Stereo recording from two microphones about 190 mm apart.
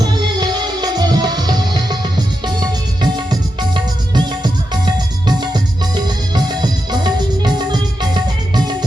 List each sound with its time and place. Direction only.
0.0 s music: 20° right (ahead or behind)
5.2 s music: 20° right (ahead or behind)